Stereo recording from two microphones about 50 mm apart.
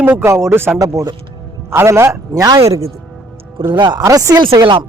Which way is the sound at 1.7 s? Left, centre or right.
Right.